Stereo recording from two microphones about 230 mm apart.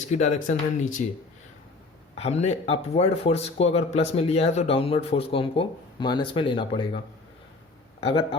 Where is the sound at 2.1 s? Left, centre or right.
Left.